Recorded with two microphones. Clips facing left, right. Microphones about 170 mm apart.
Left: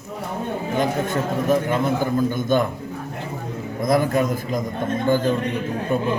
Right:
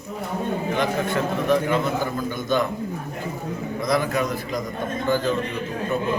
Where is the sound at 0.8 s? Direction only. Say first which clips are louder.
Left 3 dB; 45° left (ahead or behind).